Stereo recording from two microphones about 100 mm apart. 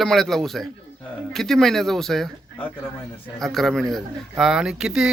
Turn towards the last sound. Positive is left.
turn(degrees=-5)  # may be behind; listen again after turning